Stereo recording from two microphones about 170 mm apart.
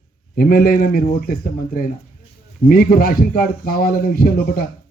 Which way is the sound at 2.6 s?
60° left (ahead or behind).